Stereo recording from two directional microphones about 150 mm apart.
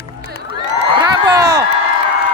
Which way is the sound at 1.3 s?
25° right (ahead or behind).